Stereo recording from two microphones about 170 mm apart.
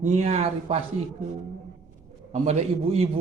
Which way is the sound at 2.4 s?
40° right (ahead or behind).